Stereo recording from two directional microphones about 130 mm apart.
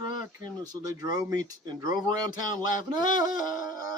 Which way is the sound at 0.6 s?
30° right (ahead or behind).